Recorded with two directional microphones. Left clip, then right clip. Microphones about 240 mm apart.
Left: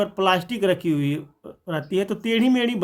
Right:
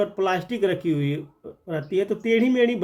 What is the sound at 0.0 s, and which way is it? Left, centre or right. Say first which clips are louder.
Speech: left 3 dB; left.